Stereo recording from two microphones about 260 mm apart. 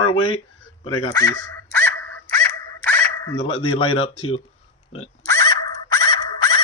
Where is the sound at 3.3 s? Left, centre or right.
Centre.